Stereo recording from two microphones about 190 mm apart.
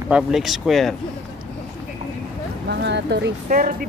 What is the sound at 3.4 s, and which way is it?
Speech, 45° right (ahead or behind).